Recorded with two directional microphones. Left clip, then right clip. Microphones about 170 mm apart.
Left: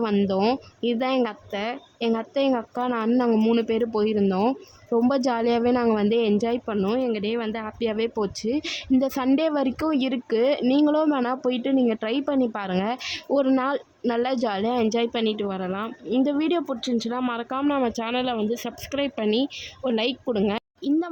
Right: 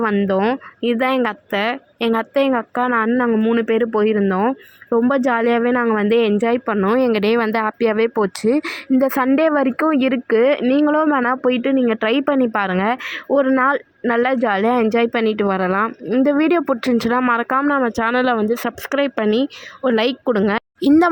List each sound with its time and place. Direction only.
0.3 s speech: 20° right (ahead or behind)
3.2 s speech: 5° right (ahead or behind)
3.6 s speech: 20° right (ahead or behind)
6.1 s speech: 25° right (ahead or behind)
7.0 s speech: 40° right (ahead or behind); by 13.0 s 25° right (ahead or behind)
13.3 s speech: 10° right (ahead or behind); by 15.9 s 35° right (ahead or behind)
16.0 s speech: 25° right (ahead or behind)
17.7 s speech: 25° right (ahead or behind)
17.9 s speech: 40° right (ahead or behind)
19.8 s speech: 25° right (ahead or behind)